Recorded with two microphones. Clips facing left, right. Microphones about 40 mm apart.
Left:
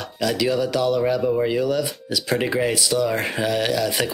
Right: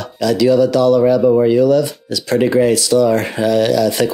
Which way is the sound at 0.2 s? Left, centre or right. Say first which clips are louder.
Right 9 dB; centre.